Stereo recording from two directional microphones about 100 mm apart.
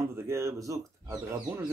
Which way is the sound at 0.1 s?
25° right (ahead or behind).